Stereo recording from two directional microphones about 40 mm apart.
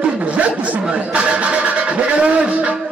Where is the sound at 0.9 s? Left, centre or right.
Right.